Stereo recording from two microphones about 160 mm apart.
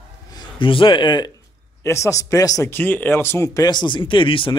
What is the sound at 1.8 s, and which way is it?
Speech, 15° left (ahead or behind).